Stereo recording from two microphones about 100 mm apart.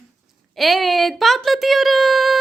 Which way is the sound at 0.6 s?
Centre (ahead or behind).